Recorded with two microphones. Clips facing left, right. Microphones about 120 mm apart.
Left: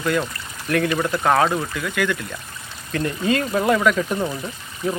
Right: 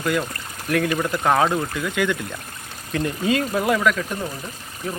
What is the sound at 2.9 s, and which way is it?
Speech, 10° right (ahead or behind).